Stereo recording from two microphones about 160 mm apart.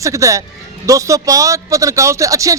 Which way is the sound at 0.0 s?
20° right (ahead or behind).